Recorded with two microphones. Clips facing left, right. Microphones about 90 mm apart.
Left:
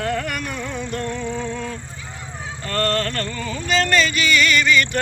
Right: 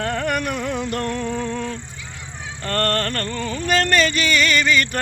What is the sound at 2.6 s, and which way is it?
Speech, 50° right (ahead or behind).